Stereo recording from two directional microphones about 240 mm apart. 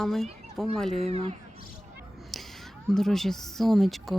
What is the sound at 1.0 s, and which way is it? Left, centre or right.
Speech, right.